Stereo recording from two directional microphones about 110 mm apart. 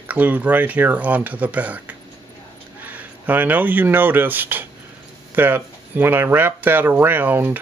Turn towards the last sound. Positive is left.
turn(degrees=-15)  # may be behind; listen again after turning